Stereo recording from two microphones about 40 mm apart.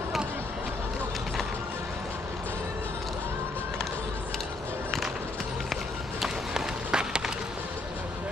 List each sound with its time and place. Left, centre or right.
6.2 s run: centre